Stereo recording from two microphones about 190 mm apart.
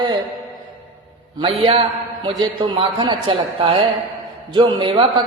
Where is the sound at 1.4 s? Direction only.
30° right (ahead or behind).